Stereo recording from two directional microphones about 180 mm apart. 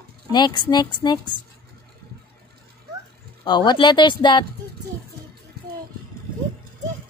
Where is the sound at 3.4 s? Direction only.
25° left (ahead or behind).